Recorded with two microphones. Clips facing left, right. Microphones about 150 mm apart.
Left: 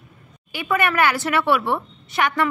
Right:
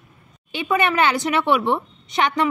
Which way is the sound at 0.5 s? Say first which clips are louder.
Right 1 dB; 20° right (ahead or behind).